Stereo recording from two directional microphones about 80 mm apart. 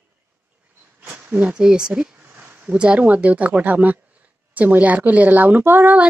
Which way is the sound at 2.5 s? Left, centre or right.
Centre.